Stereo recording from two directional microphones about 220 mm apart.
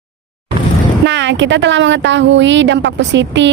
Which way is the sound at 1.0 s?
55° right (ahead or behind).